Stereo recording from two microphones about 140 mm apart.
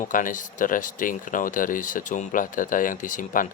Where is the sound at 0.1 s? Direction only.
70° left (ahead or behind).